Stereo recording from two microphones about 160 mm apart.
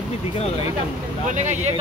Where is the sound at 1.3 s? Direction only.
50° right (ahead or behind).